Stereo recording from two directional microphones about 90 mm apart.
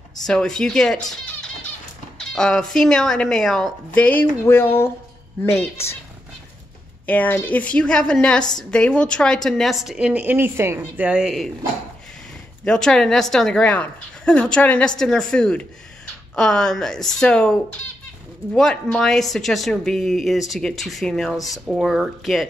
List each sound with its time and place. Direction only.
0.2 s a woman's voice: 5° left (ahead or behind)
2.1 s a woman's voice: 5° left (ahead or behind)
3.9 s speech: 15° left (ahead or behind)
7.1 s a woman's voice: 20° left (ahead or behind); by 10.8 s 30° right (ahead or behind)
11.0 s speech: 10° right (ahead or behind)
12.6 s a woman's voice: 10° left (ahead or behind)